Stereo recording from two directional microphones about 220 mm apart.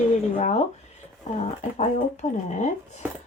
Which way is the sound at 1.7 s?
30° left (ahead or behind).